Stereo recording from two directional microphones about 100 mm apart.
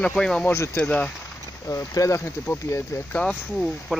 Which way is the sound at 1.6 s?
30° left (ahead or behind).